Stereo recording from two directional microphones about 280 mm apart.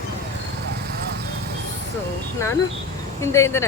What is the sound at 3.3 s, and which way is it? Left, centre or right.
Speech, centre.